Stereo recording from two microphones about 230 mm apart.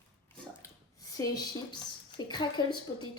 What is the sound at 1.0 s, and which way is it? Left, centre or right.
A woman's voice, centre.